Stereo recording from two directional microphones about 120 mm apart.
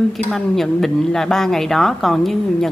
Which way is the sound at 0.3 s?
Centre (ahead or behind).